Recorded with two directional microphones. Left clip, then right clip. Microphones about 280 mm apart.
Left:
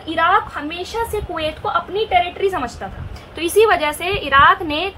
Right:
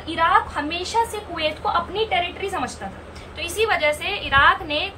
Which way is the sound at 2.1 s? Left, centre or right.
Centre.